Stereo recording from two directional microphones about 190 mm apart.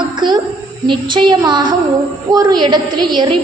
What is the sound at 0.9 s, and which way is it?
A woman's voice, 25° right (ahead or behind).